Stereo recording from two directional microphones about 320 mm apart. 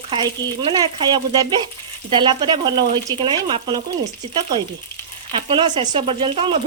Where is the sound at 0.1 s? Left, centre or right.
Centre.